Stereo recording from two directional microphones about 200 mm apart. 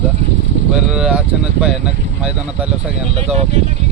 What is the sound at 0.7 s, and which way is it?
Speech, 5° right (ahead or behind).